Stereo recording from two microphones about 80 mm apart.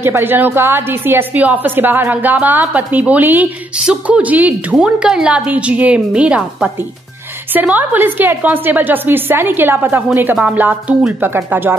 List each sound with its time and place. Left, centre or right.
0.0 s a woman's voice: right
3.8 s a woman's voice: centre
4.7 s a woman's voice: centre; by 11.7 s right